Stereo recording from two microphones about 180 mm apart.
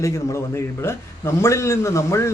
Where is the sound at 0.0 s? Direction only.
15° left (ahead or behind).